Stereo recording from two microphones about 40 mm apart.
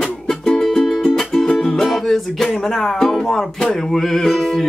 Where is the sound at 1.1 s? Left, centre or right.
Centre.